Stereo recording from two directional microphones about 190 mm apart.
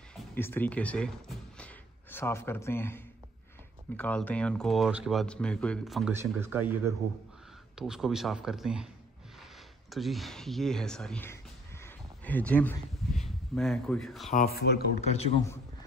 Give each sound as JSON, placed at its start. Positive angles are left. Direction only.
{"t": 0.1, "sound": "a sound", "side_deg": 0}
{"t": 0.4, "sound": "speech", "side_deg": 10}
{"t": 6.1, "sound": "speech", "side_deg": -10}
{"t": 9.8, "sound": "speech", "side_deg": 0}
{"t": 11.8, "sound": "a sound", "side_deg": 10}
{"t": 14.3, "sound": "speech", "side_deg": 55}
{"t": 15.0, "sound": "a man's voice", "side_deg": 35}